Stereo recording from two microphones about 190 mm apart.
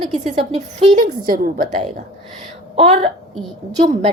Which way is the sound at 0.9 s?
45° right (ahead or behind).